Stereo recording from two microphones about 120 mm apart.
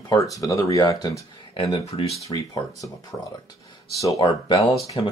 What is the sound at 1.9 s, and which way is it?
Speech, 60° left (ahead or behind).